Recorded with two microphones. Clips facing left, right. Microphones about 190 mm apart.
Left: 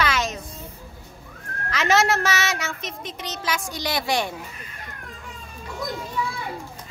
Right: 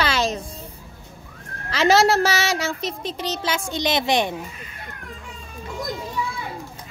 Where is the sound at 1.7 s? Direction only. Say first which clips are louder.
Right 4 dB; 35° right (ahead or behind).